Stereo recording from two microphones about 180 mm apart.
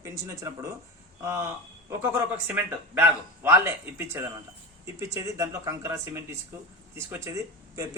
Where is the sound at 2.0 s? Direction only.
10° right (ahead or behind).